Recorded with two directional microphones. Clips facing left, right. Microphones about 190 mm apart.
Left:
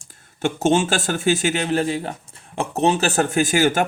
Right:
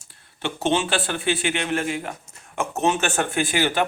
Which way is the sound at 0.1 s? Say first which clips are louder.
Left 6 dB; 45° left (ahead or behind).